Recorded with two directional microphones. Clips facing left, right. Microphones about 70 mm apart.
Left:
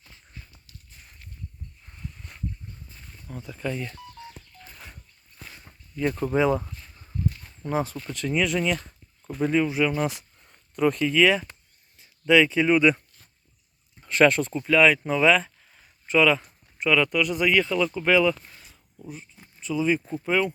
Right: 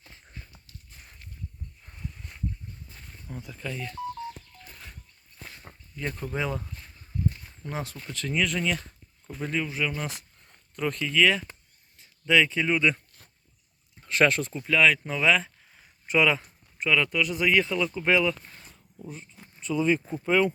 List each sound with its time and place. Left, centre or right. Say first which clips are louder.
0.0 s horse: right 1 dB; right
1.9 s a sound: even; centre
3.2 s speech: left 2 dB; centre
3.6 s speech: left 5 dB; centre
6.0 s speech: left 8 dB; centre
7.6 s speech: left 8 dB; centre
8.0 s speech: left 3 dB; centre
14.0 s speech: left 4 dB; centre
15.0 s a sound: left 4 dB; centre
16.0 s speech: left 3 dB; centre
16.4 s speech: left 4 dB; centre